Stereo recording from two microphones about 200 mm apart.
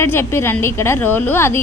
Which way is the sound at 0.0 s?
10° left (ahead or behind).